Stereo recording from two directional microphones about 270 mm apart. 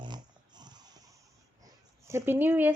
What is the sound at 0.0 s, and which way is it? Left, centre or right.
Dog, centre.